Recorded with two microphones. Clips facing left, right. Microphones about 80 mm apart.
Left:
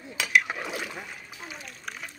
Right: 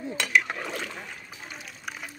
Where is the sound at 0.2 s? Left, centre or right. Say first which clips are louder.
Left 1 dB; centre.